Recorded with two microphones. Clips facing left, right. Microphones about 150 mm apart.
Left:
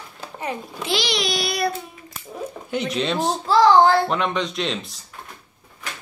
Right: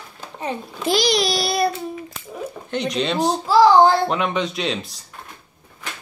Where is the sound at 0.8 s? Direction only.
40° right (ahead or behind).